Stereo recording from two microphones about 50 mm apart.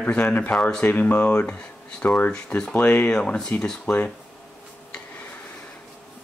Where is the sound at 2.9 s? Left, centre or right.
Centre.